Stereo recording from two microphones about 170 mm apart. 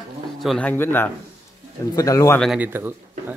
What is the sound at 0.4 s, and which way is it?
A man's voice, 5° left (ahead or behind).